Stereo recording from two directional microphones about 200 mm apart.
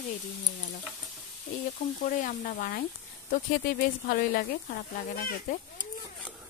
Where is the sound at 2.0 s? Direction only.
40° left (ahead or behind).